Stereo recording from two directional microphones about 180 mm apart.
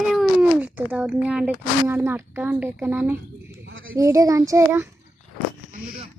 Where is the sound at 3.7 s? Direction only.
90° right.